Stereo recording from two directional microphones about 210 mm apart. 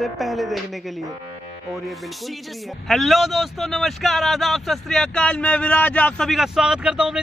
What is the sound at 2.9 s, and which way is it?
A man's voice, centre (ahead or behind).